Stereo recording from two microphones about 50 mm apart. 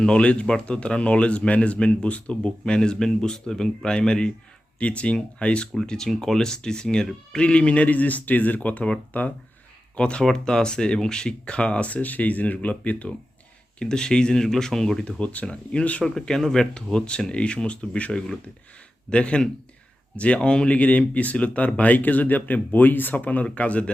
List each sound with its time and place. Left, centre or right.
0.0 s speech: centre
13.7 s speech: centre
16.0 s speech: centre